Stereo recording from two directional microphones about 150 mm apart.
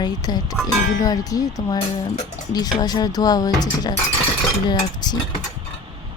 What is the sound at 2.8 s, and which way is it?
Speech, 25° left (ahead or behind).